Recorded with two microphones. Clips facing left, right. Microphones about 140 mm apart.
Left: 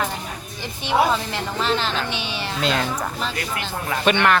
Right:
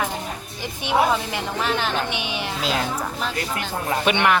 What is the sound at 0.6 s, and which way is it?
A woman's voice, 15° right (ahead or behind).